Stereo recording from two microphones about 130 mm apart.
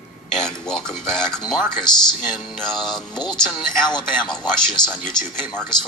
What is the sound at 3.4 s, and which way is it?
Speech, 5° right (ahead or behind).